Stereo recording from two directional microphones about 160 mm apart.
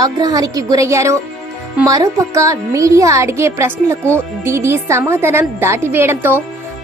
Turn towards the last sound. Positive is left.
turn(degrees=-15)  # may be behind; listen again after turning